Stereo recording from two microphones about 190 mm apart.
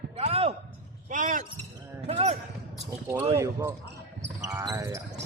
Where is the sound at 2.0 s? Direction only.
35° right (ahead or behind).